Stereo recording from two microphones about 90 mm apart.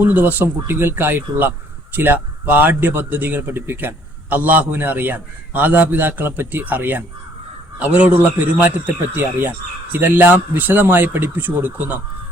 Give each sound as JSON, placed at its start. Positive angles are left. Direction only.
{"t": 0.0, "sound": "a man's voice", "side_deg": -20}